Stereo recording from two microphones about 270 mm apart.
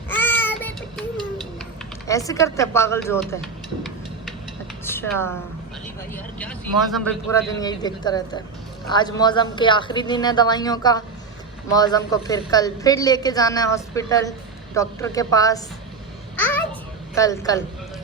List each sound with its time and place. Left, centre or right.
0.1 s a sound: centre
2.0 s a woman's voice: centre
3.4 s a sound: centre
4.9 s a woman's voice: centre
16.4 s babbling: centre
17.2 s a woman's voice: centre